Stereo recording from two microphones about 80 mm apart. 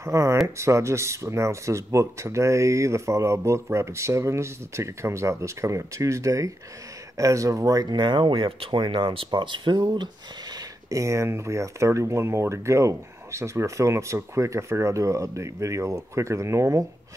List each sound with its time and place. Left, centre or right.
0.0 s speech: right
10.9 s speech: right